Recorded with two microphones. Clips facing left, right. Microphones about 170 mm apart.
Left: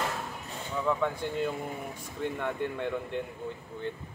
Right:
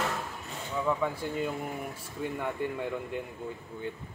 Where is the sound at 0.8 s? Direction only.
5° right (ahead or behind).